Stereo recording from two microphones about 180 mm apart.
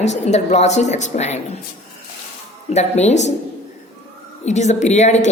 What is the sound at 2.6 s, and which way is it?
Speech, 40° left (ahead or behind).